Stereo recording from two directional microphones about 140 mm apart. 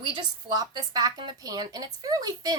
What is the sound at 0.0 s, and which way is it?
A woman's voice, 30° right (ahead or behind).